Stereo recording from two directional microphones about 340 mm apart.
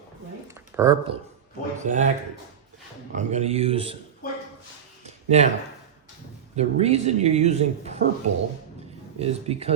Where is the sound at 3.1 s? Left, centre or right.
Centre.